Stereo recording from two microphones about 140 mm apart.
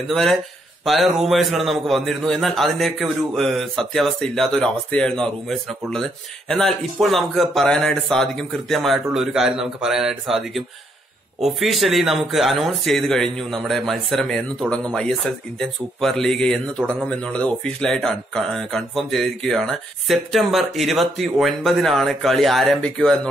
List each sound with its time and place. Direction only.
0.1 s speech: 5° left (ahead or behind)